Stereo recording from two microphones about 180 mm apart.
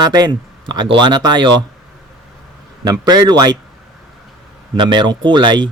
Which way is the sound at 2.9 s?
20° right (ahead or behind).